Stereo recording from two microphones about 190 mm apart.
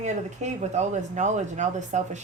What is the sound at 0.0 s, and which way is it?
Speech, 35° right (ahead or behind).